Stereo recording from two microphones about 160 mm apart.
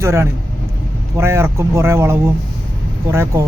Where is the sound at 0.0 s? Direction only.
15° right (ahead or behind).